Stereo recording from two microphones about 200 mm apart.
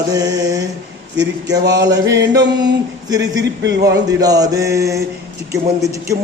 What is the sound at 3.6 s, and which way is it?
Speech, 60° right (ahead or behind).